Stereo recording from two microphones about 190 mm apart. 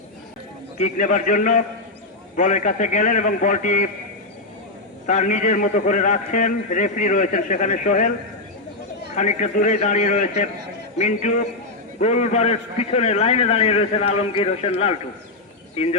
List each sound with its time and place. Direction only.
0.8 s a man's voice: 40° left (ahead or behind)
5.0 s a man's voice: 40° left (ahead or behind)
9.1 s a man's voice: 40° left (ahead or behind)